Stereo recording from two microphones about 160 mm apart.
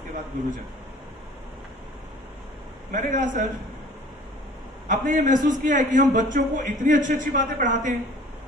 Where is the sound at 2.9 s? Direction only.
55° right (ahead or behind).